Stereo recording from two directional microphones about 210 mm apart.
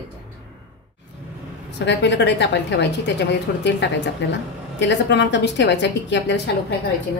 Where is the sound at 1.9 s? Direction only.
55° left (ahead or behind).